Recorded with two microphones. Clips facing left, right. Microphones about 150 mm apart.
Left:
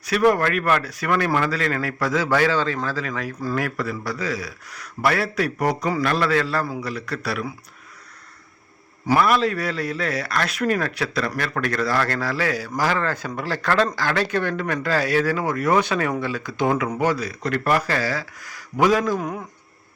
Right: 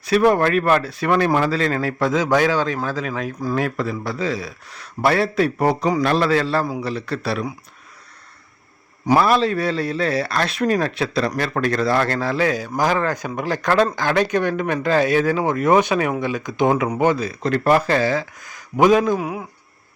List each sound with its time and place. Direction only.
0.0 s speech: 25° right (ahead or behind)
9.1 s speech: 30° right (ahead or behind)
19.2 s speech: 10° right (ahead or behind)